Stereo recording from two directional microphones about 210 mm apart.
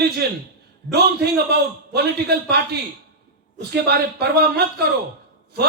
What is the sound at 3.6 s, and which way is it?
Speech, 50° right (ahead or behind).